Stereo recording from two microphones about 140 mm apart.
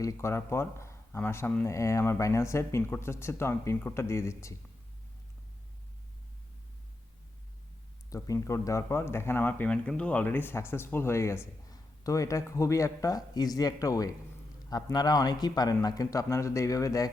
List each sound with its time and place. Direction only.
0.0 s speech: 20° left (ahead or behind)
8.1 s speech: 20° left (ahead or behind)